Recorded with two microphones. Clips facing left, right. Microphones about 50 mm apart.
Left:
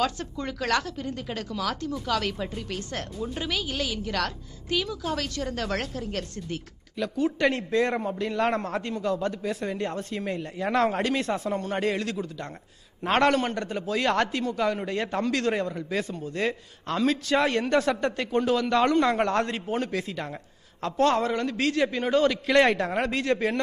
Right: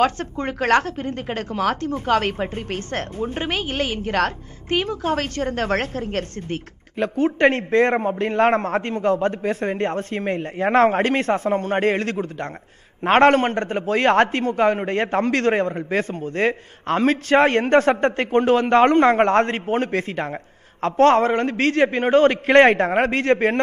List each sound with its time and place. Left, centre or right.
0.0 s a woman's voice: right